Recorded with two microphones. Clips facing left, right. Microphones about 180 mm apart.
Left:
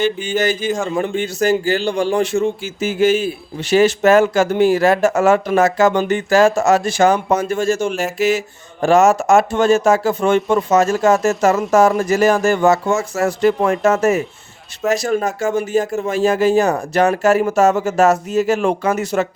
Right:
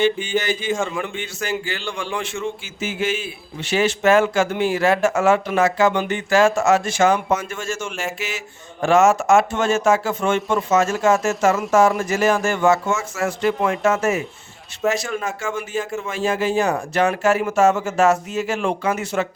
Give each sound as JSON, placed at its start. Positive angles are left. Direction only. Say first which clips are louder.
{"t": 0.0, "sound": "a man's voice", "louder": "left 2 dB", "side_deg": 40}